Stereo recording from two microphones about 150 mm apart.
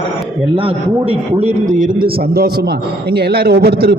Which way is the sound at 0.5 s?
40° right (ahead or behind).